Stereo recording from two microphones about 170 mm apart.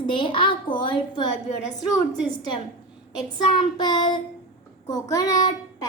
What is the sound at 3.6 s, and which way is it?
A child's voice, 25° left (ahead or behind).